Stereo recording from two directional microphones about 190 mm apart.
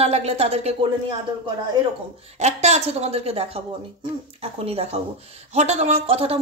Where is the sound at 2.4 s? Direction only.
35° right (ahead or behind).